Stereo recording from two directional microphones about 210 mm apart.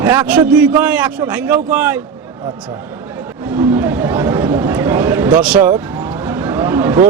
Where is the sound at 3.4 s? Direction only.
10° right (ahead or behind).